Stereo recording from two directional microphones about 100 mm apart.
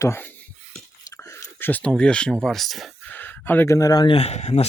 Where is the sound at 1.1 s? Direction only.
30° left (ahead or behind).